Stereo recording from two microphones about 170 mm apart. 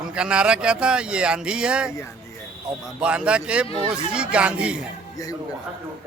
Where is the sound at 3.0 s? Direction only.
5° right (ahead or behind).